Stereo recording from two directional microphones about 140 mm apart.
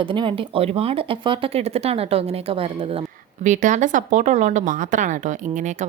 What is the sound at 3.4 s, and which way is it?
Speech, 65° right (ahead or behind).